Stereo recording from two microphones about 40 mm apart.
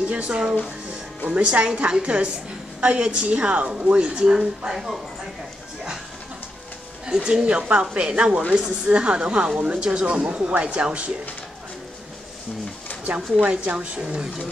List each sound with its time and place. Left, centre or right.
0.1 s speech: right
7.1 s speech: centre
7.4 s speech: right
13.0 s speech: right